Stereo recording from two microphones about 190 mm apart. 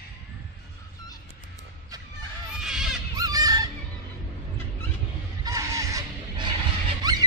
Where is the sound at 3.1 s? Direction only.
20° right (ahead or behind).